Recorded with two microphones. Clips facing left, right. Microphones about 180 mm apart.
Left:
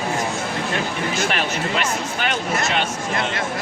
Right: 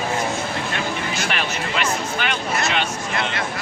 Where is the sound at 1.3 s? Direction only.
40° left (ahead or behind).